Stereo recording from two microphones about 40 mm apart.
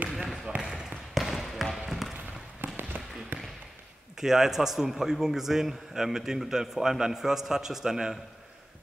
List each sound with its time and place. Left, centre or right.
0.6 s basketball bounce: right
1.1 s trickle: centre
1.9 s basketball bounce: centre
2.6 s basketball bounce: right
4.2 s a man's voice: centre